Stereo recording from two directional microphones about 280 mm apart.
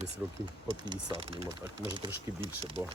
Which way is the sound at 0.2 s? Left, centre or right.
Centre.